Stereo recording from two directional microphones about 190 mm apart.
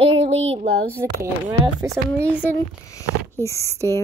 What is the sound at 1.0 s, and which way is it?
Speech, 15° right (ahead or behind).